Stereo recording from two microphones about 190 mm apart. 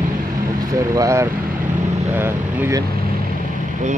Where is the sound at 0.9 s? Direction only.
15° right (ahead or behind).